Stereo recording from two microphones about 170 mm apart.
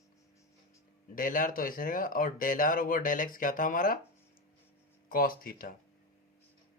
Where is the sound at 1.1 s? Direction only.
55° left (ahead or behind).